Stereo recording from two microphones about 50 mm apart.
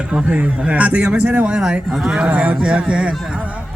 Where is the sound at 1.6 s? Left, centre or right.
Centre.